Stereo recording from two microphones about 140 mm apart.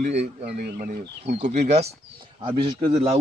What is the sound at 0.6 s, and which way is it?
Speech, 90° right.